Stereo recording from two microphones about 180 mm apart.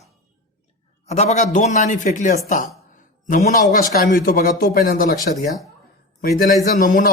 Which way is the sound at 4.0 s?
55° left (ahead or behind).